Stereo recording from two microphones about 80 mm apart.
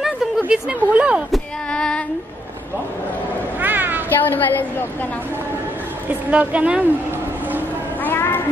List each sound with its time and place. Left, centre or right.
0.5 s speech: centre
1.7 s child singing: centre
3.6 s cat: right
4.2 s a woman's voice: left
6.3 s speech: centre
8.0 s cat: left